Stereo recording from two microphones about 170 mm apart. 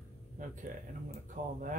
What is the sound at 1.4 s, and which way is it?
Speech, 50° right (ahead or behind).